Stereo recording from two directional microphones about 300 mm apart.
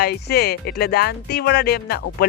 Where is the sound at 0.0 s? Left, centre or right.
Left.